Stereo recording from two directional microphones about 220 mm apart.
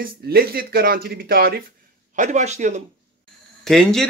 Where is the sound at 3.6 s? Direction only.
Centre (ahead or behind).